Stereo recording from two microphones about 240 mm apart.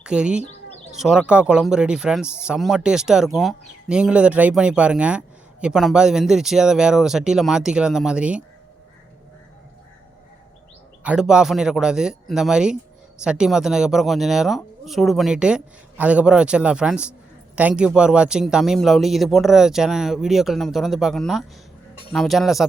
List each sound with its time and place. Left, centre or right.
0.0 s speech: centre
11.0 s speech: centre